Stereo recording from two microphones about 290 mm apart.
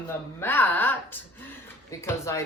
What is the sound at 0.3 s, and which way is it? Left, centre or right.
A woman's voice, centre.